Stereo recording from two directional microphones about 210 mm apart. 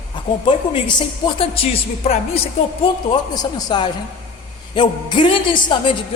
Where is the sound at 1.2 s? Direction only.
25° left (ahead or behind).